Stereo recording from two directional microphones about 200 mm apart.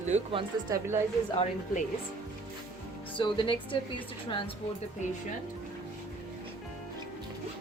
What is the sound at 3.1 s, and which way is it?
Speech, 25° left (ahead or behind).